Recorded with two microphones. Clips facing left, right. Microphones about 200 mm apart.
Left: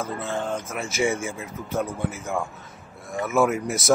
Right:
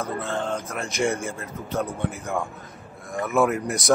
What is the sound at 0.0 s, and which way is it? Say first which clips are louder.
Speech: right 1 dB; 5° left (ahead or behind).